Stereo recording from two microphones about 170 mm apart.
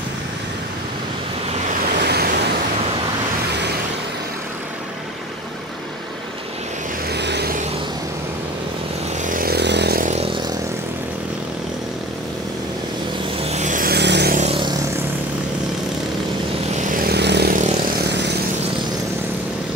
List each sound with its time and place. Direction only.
2.0 s waves: 65° right (ahead or behind)
7.1 s vehicle: 80° right
9.2 s vehicle: 55° right (ahead or behind); by 10.0 s 80° right
10.0 s vehicle: 40° right (ahead or behind)
13.4 s vehicle: 40° right (ahead or behind); by 14.3 s 80° right
14.3 s vehicle: 40° right (ahead or behind)
16.7 s vehicle: 55° right (ahead or behind); by 17.6 s 75° right (ahead or behind)